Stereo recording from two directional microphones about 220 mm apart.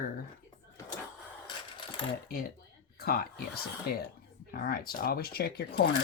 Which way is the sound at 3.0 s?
45° left (ahead or behind).